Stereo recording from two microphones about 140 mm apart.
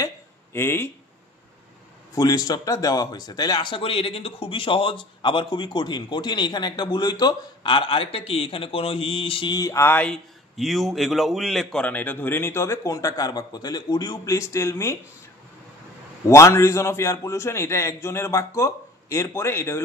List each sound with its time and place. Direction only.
0.0 s a sound: 15° left (ahead or behind)
2.1 s speech: 25° left (ahead or behind)
16.3 s speech: 20° left (ahead or behind)